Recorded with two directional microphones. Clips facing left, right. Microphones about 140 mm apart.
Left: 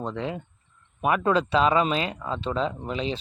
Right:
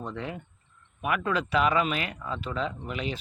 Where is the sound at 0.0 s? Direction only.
20° left (ahead or behind).